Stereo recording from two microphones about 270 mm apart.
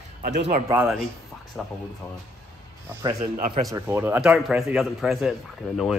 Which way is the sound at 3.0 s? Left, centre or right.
Centre.